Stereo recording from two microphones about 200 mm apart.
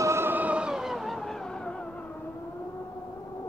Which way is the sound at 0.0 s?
10° right (ahead or behind).